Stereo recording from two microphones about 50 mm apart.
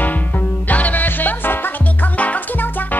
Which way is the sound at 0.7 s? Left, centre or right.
Left.